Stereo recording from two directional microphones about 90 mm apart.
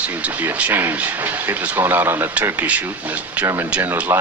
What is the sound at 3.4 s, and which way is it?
Speech, 25° right (ahead or behind).